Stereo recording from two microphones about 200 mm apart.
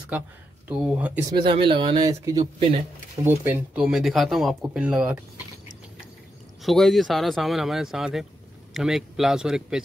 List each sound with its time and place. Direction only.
0.7 s speech: 5° right (ahead or behind)
1.3 s speech: 25° right (ahead or behind); by 5.2 s 5° right (ahead or behind)
6.6 s speech: centre (ahead or behind)